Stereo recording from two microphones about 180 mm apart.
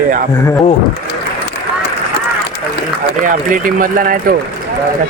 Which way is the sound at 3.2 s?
45° right (ahead or behind).